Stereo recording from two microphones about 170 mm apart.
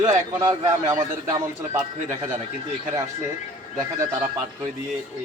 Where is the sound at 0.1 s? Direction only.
20° right (ahead or behind).